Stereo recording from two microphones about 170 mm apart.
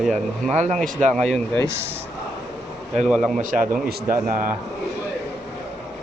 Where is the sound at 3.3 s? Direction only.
50° right (ahead or behind).